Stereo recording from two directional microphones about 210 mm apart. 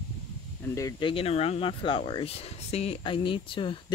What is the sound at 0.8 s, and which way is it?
Speech, 20° left (ahead or behind).